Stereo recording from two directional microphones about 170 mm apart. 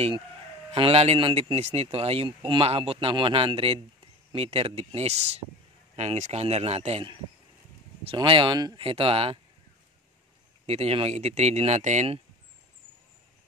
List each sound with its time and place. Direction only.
0.7 s speech: 35° right (ahead or behind)
10.7 s speech: 35° right (ahead or behind)